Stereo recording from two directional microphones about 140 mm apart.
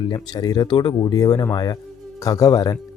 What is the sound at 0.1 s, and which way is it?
Speech, 30° left (ahead or behind).